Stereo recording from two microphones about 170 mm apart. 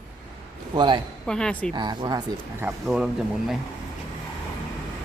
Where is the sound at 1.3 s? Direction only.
5° left (ahead or behind).